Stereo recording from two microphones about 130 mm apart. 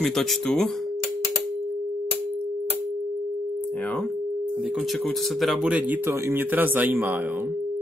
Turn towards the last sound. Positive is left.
turn(degrees=-15)  # may be behind; listen again after turning